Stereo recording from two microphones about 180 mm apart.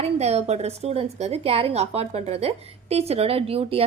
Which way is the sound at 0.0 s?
35° right (ahead or behind).